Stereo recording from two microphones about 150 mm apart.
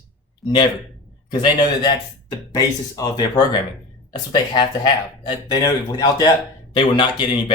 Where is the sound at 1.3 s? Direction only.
30° left (ahead or behind).